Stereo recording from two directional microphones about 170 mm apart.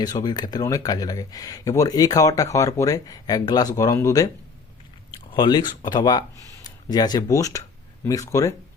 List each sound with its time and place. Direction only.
0.0 s speech: 25° left (ahead or behind)
5.3 s speech: 25° left (ahead or behind)